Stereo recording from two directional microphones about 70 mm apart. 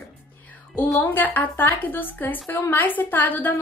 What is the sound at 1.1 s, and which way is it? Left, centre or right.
A woman's voice, left.